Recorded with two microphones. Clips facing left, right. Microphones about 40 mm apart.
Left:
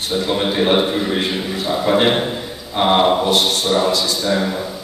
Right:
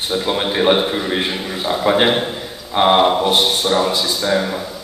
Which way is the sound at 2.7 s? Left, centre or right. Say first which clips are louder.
Right 1 dB; centre.